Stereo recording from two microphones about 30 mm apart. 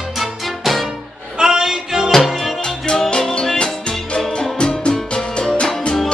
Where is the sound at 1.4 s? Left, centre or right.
Right.